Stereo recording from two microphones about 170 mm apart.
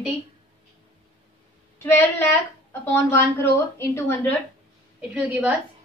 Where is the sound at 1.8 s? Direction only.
15° left (ahead or behind).